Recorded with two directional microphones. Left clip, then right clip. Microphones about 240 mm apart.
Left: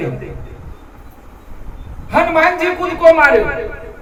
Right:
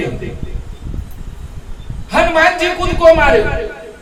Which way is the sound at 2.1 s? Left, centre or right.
Centre.